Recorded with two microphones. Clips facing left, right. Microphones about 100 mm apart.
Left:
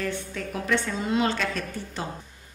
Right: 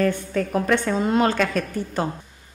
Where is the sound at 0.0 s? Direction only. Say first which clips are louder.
Right 9 dB; 50° right (ahead or behind).